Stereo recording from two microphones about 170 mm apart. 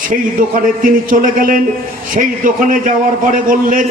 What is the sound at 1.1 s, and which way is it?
A man's voice, 50° right (ahead or behind).